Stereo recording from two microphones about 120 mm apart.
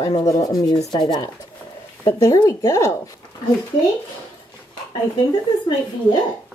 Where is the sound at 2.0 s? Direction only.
30° left (ahead or behind).